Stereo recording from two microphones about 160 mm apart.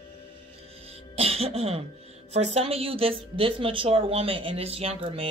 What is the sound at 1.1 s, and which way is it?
Speech, 40° right (ahead or behind).